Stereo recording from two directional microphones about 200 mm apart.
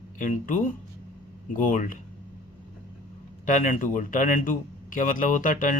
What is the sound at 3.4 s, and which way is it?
Speech, 40° left (ahead or behind).